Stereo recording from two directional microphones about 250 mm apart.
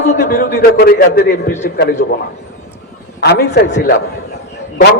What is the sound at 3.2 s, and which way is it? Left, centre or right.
Speech, left.